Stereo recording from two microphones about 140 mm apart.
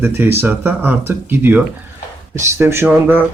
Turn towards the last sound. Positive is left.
turn(degrees=-15)  # may be behind; listen again after turning